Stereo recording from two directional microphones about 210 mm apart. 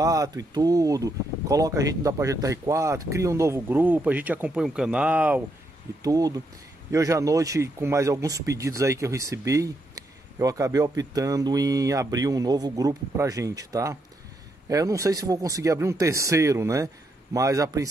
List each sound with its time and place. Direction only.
0.0 s speech: 15° right (ahead or behind)